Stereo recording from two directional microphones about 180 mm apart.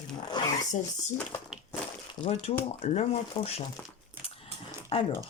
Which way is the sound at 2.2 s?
35° left (ahead or behind).